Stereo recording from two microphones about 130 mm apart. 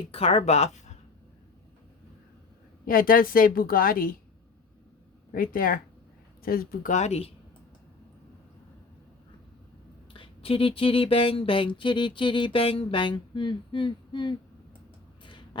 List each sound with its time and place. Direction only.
0.1 s a woman's voice: 50° left (ahead or behind)
2.8 s a woman's voice: 90° left
5.3 s a woman's voice: 90° left
6.8 s a woman's voice: 65° left (ahead or behind)
10.1 s speech: 45° left (ahead or behind)